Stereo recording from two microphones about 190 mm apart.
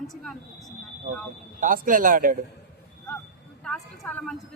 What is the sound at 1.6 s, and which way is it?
Speech, 45° right (ahead or behind).